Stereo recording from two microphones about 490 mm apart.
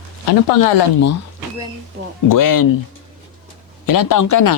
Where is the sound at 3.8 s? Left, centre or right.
Left.